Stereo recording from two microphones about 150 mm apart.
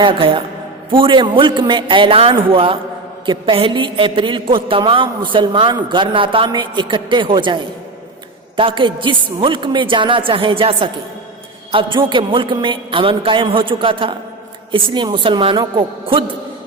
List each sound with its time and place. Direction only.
0.0 s a woman's voice: 35° right (ahead or behind)